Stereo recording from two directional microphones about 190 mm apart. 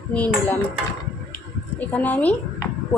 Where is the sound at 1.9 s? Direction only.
10° left (ahead or behind).